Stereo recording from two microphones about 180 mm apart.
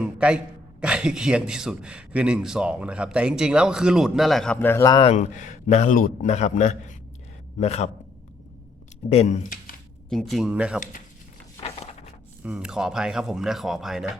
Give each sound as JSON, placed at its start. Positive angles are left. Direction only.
{"t": 0.0, "sound": "a man's voice", "side_deg": -5}
{"t": 5.0, "sound": "a man's voice", "side_deg": 40}
{"t": 9.0, "sound": "speech", "side_deg": 40}
{"t": 10.1, "sound": "a man's voice", "side_deg": 0}
{"t": 12.4, "sound": "a man's voice", "side_deg": -5}